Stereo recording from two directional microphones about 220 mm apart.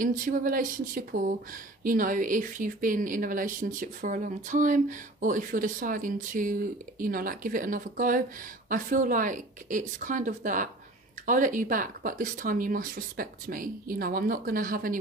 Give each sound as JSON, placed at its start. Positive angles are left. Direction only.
{"t": 0.0, "sound": "speech", "side_deg": -40}